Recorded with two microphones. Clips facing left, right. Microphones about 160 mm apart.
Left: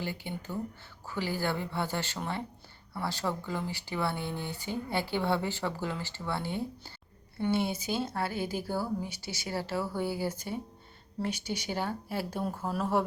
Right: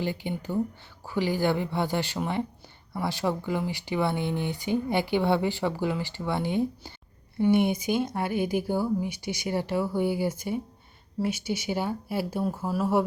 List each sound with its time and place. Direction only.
0.0 s speech: 15° right (ahead or behind)